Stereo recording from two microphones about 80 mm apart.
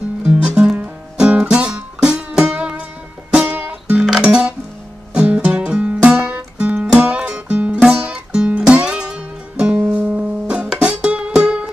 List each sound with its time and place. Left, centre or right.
0.2 s music: centre